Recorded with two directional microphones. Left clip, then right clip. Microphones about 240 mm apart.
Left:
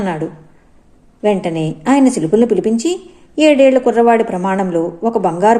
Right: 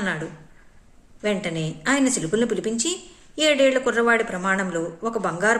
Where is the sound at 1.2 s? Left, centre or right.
Centre.